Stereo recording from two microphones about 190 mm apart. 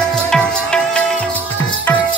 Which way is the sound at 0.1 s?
5° left (ahead or behind).